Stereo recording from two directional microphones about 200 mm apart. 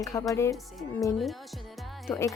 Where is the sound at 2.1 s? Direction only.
Centre (ahead or behind).